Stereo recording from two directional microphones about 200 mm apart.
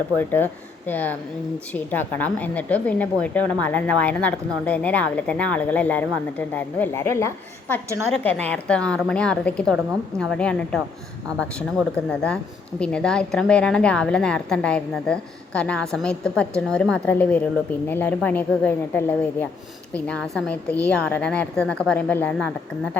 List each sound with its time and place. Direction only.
0.2 s a woman's voice: 10° left (ahead or behind)
12.0 s a woman's voice: 5° left (ahead or behind)